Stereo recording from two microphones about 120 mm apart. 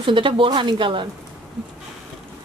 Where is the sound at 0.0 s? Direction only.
45° right (ahead or behind).